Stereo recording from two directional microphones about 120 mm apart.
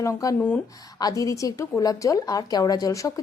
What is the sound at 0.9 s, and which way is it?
Speech, 30° left (ahead or behind).